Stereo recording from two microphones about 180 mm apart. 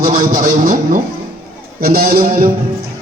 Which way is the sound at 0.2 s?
50° right (ahead or behind).